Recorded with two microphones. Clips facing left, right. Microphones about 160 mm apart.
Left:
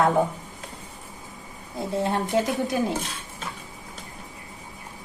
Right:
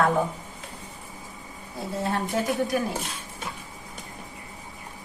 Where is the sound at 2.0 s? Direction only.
20° left (ahead or behind).